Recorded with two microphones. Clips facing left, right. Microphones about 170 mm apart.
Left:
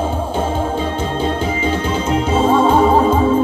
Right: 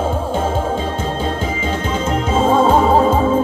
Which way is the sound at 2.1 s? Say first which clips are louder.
Left 1 dB; 45° right (ahead or behind).